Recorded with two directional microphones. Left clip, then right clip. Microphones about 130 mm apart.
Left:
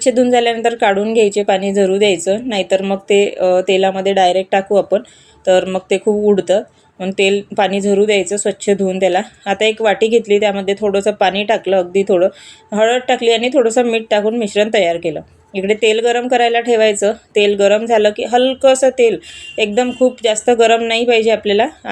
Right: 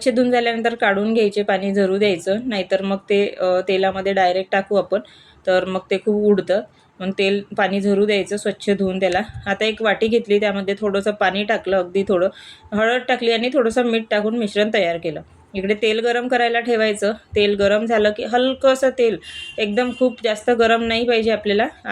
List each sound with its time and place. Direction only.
0.0 s speech: 40° left (ahead or behind)